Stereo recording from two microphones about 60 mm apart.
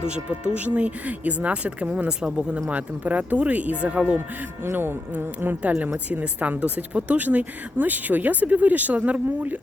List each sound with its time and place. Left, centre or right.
0.1 s speech: centre
4.6 s speech: right
6.1 s speech: right